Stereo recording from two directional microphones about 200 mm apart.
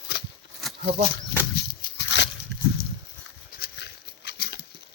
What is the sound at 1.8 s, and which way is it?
Dog, 60° left (ahead or behind).